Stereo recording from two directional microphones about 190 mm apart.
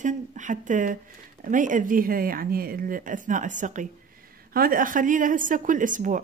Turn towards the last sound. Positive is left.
turn(degrees=-45)  # may be behind; listen again after turning